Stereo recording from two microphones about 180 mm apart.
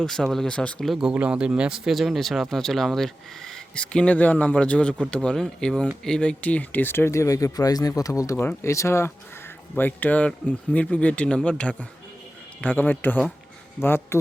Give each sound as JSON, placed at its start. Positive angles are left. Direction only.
{"t": 0.0, "sound": "speech", "side_deg": 5}